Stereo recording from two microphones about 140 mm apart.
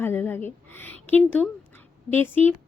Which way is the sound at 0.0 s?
15° left (ahead or behind).